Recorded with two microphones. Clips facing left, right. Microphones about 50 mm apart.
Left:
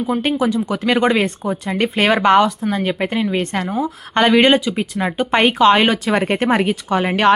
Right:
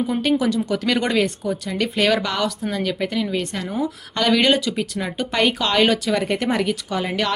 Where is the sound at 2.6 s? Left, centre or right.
Left.